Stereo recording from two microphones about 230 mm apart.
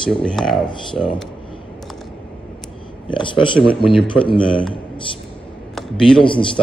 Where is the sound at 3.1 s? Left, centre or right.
Left.